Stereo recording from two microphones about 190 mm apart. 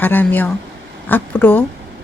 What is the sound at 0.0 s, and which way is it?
A woman's voice, 10° left (ahead or behind).